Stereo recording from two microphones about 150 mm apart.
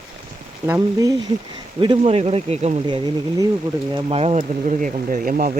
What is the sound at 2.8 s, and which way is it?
Speech, 30° right (ahead or behind).